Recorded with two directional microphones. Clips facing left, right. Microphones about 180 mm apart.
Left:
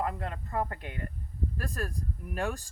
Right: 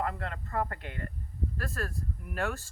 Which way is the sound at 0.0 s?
15° left (ahead or behind).